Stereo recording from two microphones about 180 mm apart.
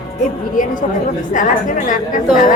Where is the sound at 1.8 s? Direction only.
45° left (ahead or behind).